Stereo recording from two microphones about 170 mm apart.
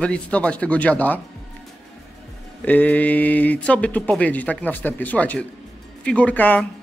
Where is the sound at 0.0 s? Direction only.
5° left (ahead or behind).